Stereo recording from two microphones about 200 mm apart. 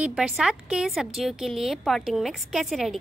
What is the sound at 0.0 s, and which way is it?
A woman's voice, 5° right (ahead or behind).